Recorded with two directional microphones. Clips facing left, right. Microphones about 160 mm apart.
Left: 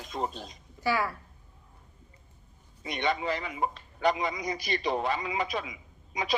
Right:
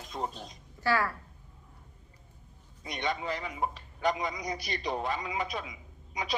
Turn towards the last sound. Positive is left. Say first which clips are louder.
# left 3 dB
turn(degrees=90)